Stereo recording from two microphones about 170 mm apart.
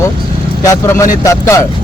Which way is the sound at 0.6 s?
20° left (ahead or behind).